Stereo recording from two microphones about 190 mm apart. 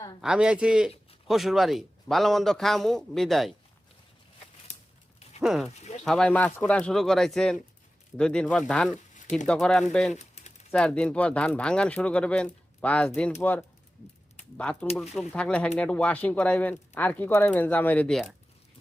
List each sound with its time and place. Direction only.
0.2 s speech: 5° right (ahead or behind)
5.4 s speech: centre (ahead or behind)
10.2 s pigeon: 35° left (ahead or behind)
10.7 s speech: 5° left (ahead or behind)